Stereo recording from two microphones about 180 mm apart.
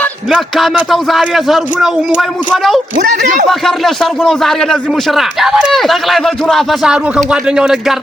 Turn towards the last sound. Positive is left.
turn(degrees=0)  # may be behind; listen again after turning